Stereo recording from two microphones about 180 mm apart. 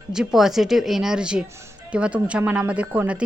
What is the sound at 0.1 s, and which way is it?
Speech, 5° right (ahead or behind).